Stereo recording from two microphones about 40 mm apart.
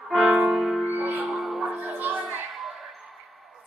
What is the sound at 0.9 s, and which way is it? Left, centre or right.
Music, right.